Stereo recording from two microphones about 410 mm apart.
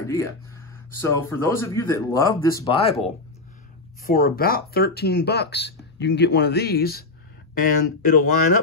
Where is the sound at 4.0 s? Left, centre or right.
Left.